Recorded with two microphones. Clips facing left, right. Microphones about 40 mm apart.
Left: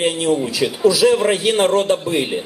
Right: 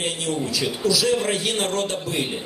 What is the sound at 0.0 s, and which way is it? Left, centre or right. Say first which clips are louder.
A man's voice: left 8 dB; centre.